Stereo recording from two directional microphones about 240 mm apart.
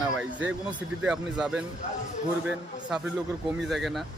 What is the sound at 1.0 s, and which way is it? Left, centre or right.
Speech, centre.